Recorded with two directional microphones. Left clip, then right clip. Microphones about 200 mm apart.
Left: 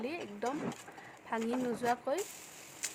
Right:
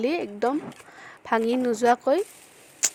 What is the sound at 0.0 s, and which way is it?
Speech, 45° right (ahead or behind).